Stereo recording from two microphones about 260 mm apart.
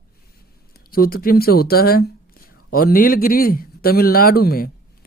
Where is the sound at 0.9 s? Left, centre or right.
Left.